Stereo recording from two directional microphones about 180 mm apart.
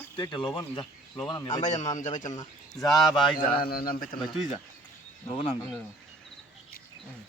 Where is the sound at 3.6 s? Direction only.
55° left (ahead or behind).